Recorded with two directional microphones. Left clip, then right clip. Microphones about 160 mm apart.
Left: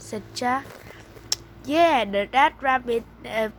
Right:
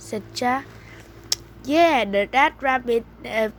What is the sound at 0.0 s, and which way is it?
Speech, 20° right (ahead or behind).